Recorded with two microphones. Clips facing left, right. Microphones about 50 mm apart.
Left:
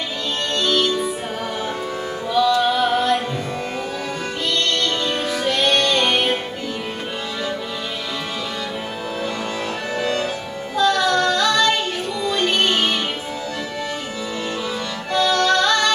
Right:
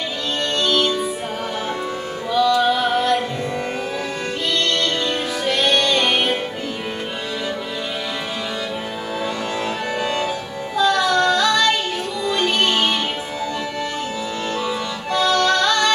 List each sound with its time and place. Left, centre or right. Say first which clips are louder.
2.3 s music: right 1 dB; centre
5.0 s music: even; centre
10.0 s music: left 1 dB; centre
10.8 s female singing: right 1 dB; centre
12.3 s music: even; centre
15.1 s music: even; centre